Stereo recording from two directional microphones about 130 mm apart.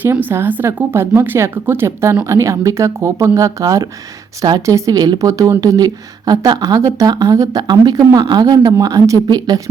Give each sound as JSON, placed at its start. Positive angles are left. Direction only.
{"t": 0.0, "sound": "speech", "side_deg": -15}